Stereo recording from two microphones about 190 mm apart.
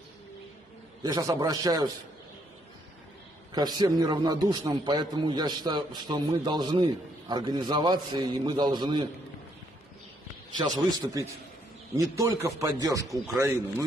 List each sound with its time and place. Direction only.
1.0 s a man's voice: 20° right (ahead or behind)
3.5 s a man's voice: 20° right (ahead or behind)
10.9 s a man's voice: 20° right (ahead or behind)